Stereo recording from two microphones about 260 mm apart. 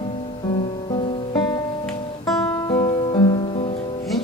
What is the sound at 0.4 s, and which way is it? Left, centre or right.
Music, left.